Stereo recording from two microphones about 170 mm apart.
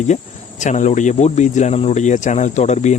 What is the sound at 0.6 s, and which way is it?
Speech, 45° left (ahead or behind).